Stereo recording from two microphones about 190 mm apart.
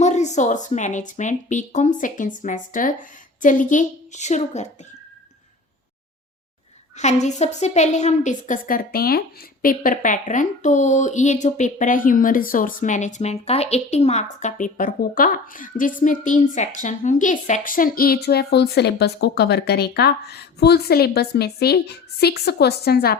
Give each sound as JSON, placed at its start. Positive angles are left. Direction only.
{"t": 0.0, "sound": "speech", "side_deg": 35}
{"t": 6.9, "sound": "a woman's voice", "side_deg": 35}